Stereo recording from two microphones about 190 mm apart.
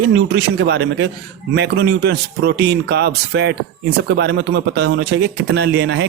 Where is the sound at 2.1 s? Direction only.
60° right (ahead or behind).